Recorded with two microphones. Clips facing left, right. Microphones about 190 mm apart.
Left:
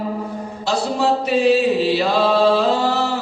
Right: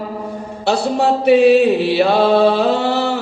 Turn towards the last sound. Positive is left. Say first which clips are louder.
# right 2 dB
turn(degrees=-65)  # may be behind; listen again after turning